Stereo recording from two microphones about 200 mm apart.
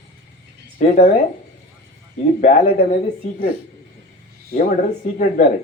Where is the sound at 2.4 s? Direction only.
40° left (ahead or behind).